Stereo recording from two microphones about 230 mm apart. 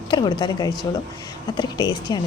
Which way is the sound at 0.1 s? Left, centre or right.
Centre.